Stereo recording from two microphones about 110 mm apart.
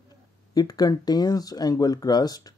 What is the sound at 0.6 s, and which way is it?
Speech, 35° left (ahead or behind).